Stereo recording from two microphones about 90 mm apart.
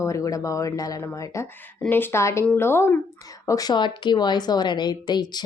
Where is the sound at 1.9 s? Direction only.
25° left (ahead or behind).